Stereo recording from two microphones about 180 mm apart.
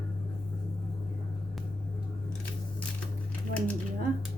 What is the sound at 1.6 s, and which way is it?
Vehicle, centre (ahead or behind).